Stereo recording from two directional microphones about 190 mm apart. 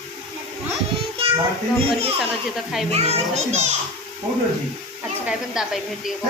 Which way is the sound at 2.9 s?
35° right (ahead or behind).